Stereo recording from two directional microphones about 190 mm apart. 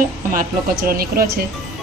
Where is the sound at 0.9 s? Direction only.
50° right (ahead or behind).